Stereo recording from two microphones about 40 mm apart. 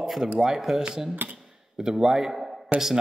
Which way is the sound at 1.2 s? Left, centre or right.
Right.